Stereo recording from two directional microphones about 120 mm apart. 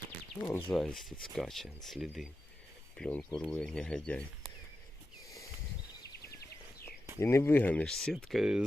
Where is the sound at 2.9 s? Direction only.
10° left (ahead or behind).